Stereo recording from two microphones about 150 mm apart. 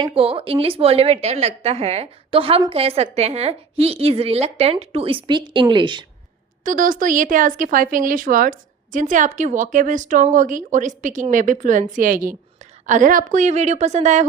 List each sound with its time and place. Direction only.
0.0 s a woman's voice: 40° right (ahead or behind)
6.7 s speech: 65° right (ahead or behind)
12.8 s a woman's voice: 55° right (ahead or behind)